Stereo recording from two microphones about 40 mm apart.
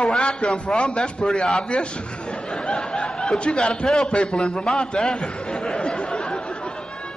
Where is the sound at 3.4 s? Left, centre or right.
Left.